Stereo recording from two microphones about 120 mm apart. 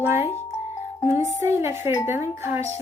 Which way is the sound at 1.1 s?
25° right (ahead or behind).